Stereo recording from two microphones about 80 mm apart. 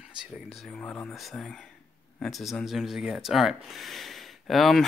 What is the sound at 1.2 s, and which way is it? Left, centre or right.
Speech, centre.